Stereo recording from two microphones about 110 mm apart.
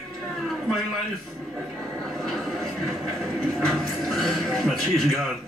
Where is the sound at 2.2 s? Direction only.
Centre (ahead or behind).